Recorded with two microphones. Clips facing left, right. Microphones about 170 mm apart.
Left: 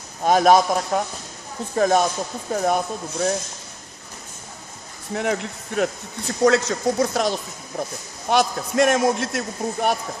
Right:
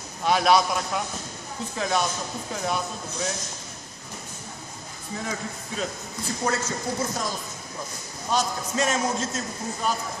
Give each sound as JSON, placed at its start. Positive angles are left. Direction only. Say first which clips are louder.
{"t": 0.2, "sound": "a man's voice", "louder": "left 5 dB", "side_deg": 45}
{"t": 5.1, "sound": "a man's voice", "louder": "left 8 dB", "side_deg": 70}